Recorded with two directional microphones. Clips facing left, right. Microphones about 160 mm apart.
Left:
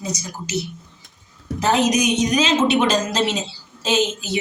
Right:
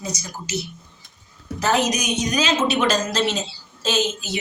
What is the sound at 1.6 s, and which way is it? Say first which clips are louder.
A woman's voice: left 3 dB; 20° left (ahead or behind).